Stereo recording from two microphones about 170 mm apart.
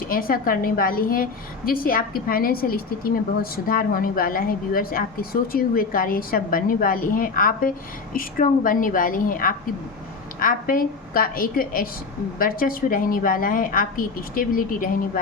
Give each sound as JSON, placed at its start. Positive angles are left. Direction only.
{"t": 0.0, "sound": "a woman's voice", "side_deg": 60}